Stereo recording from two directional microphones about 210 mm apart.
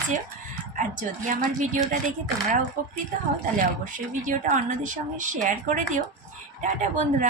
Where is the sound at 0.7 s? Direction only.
40° right (ahead or behind).